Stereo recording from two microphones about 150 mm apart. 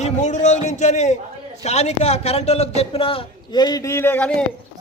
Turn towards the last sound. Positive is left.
turn(degrees=15)  # may be behind; listen again after turning